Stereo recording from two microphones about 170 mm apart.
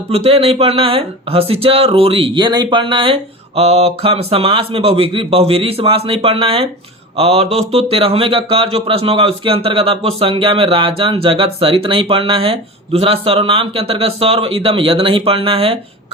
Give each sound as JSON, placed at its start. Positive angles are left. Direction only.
{"t": 0.1, "sound": "speech", "side_deg": -35}